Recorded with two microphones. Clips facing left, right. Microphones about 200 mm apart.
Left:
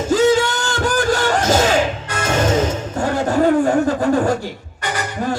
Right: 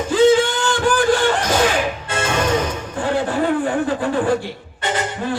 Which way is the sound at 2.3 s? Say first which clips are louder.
Left 3 dB; 25° left (ahead or behind).